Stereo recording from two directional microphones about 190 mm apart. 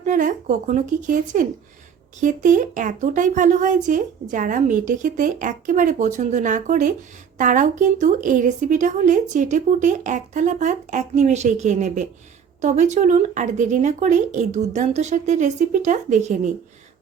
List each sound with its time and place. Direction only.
0.0 s a woman's voice: 40° right (ahead or behind)